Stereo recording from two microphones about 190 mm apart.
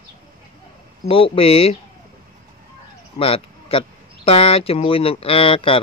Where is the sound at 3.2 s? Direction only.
30° left (ahead or behind).